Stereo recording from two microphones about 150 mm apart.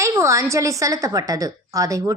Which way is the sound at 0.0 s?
20° right (ahead or behind).